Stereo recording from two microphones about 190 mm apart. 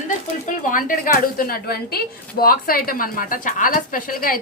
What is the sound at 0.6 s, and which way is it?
A woman's voice, 45° left (ahead or behind).